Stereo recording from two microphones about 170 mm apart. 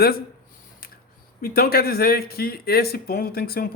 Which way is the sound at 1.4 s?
60° left (ahead or behind).